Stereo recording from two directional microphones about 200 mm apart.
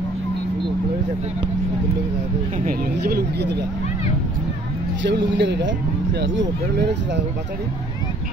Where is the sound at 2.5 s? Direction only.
45° right (ahead or behind).